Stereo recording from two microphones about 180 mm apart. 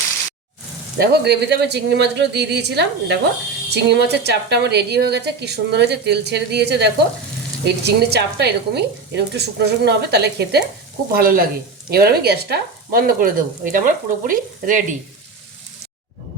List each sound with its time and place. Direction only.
0.9 s speech: 65° right (ahead or behind)
11.1 s speech: 55° right (ahead or behind)